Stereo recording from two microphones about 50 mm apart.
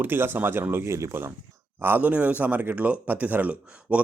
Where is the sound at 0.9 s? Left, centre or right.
Right.